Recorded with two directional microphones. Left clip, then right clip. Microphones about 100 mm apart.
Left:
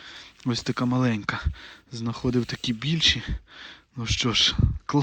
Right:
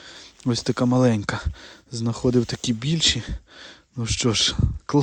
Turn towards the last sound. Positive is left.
turn(degrees=-45)  # may be behind; listen again after turning